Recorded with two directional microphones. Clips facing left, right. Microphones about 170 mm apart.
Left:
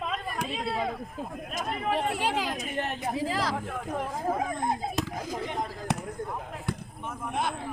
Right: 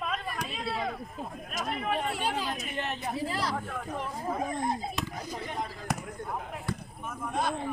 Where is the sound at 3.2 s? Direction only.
90° left.